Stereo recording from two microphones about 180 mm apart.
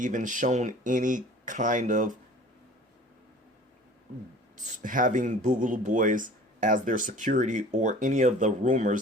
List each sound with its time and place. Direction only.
0.0 s speech: 45° right (ahead or behind)
4.5 s speech: 45° right (ahead or behind)